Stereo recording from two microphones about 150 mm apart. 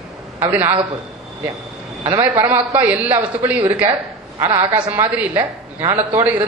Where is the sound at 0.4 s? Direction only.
15° right (ahead or behind).